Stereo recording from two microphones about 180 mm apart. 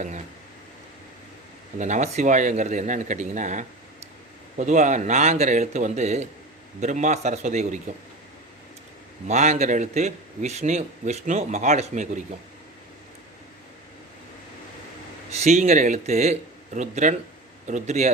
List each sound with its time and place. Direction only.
1.8 s a man's voice: 40° right (ahead or behind)
9.2 s a man's voice: 40° right (ahead or behind)
15.4 s a man's voice: 40° right (ahead or behind)